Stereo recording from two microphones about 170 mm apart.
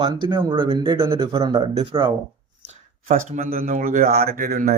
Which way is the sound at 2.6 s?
45° right (ahead or behind).